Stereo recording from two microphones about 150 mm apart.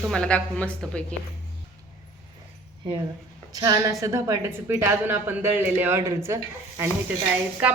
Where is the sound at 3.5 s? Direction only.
25° right (ahead or behind).